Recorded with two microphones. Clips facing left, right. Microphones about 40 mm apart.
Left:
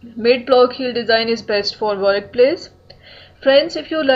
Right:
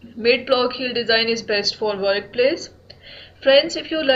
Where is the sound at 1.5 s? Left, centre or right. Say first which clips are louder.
Left 3 dB; centre.